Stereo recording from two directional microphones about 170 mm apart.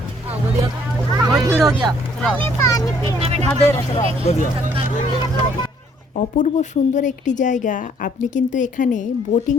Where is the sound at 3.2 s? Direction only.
35° right (ahead or behind).